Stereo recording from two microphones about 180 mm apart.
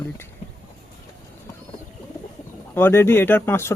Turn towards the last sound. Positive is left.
turn(degrees=15)  # may be behind; listen again after turning